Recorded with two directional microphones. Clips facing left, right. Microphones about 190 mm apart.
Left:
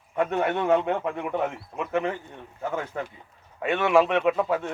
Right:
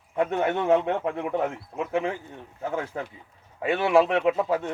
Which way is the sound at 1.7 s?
20° right (ahead or behind).